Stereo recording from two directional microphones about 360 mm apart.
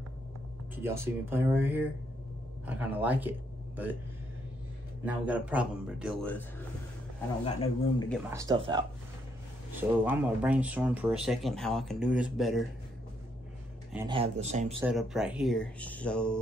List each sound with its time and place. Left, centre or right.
0.8 s speech: centre
5.0 s speech: centre
8.1 s speech: centre
13.9 s speech: centre
14.8 s speech: centre